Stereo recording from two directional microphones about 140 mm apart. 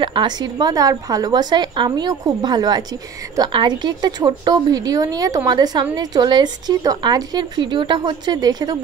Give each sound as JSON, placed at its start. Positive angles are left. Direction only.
{"t": 0.0, "sound": "a woman's voice", "side_deg": -35}